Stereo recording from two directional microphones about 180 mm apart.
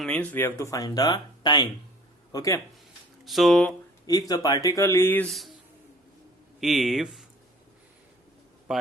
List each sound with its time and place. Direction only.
0.0 s speech: 5° left (ahead or behind)
3.2 s speech: centre (ahead or behind)
4.0 s speech: 20° left (ahead or behind); by 5.5 s 5° left (ahead or behind)
6.6 s speech: centre (ahead or behind)
8.7 s a man's voice: 5° right (ahead or behind)